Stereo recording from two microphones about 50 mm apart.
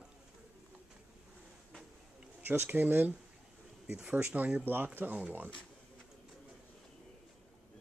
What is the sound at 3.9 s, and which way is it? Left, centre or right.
Speech, centre.